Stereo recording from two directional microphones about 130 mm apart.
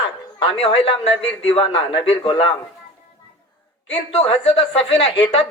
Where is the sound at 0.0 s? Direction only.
45° left (ahead or behind).